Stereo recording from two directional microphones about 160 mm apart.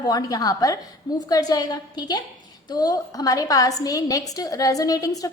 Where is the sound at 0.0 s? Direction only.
25° left (ahead or behind).